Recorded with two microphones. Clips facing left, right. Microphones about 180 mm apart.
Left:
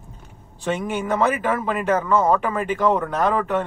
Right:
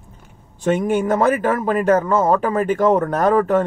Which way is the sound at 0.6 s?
45° right (ahead or behind).